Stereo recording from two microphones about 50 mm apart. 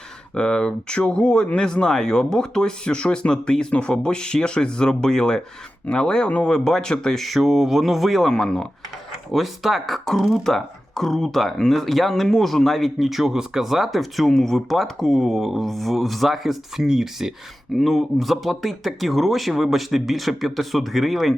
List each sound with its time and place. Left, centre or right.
0.3 s speech: centre
7.3 s speech: centre
8.3 s speech: centre
9.3 s speech: centre